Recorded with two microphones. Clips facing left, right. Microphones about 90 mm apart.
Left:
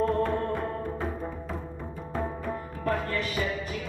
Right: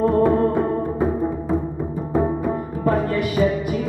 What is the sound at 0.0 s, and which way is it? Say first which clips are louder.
Music: right 9 dB; 15° right (ahead or behind).